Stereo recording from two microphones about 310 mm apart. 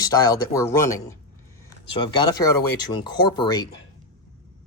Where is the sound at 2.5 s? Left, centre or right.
Left.